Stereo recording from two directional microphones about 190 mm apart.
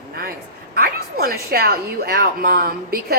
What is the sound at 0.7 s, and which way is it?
A woman's voice, 50° right (ahead or behind).